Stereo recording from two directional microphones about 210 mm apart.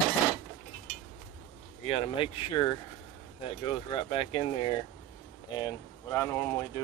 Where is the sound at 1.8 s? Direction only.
25° left (ahead or behind).